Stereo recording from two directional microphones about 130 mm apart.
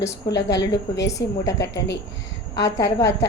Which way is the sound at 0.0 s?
25° left (ahead or behind).